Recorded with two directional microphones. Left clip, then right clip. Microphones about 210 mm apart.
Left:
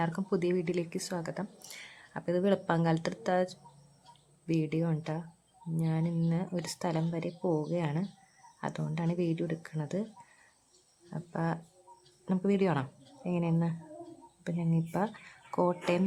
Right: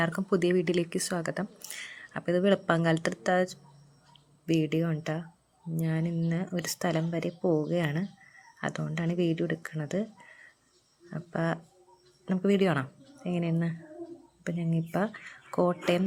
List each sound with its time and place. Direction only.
0.0 s speech: 5° right (ahead or behind)
11.1 s speech: 5° right (ahead or behind)